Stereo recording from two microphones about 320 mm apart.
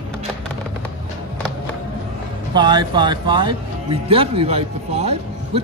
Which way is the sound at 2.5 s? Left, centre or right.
Centre.